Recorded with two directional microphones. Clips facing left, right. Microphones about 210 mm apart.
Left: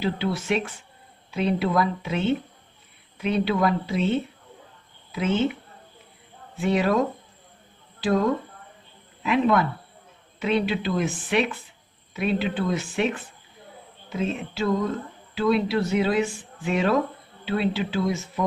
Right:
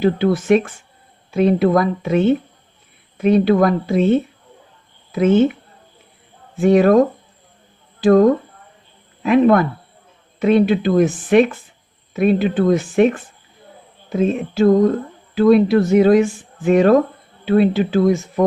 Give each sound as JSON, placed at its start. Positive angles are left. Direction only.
{"t": 0.0, "sound": "speech", "side_deg": -50}
{"t": 6.6, "sound": "speech", "side_deg": -45}
{"t": 8.0, "sound": "speech", "side_deg": -50}